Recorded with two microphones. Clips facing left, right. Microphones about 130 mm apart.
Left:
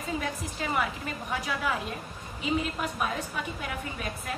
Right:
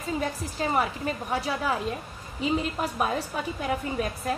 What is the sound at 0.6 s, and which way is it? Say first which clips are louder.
A woman's voice: right 5 dB; 35° right (ahead or behind).